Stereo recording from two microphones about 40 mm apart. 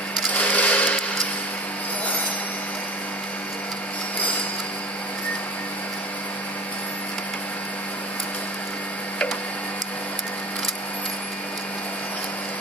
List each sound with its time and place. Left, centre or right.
0.3 s sewing machine: left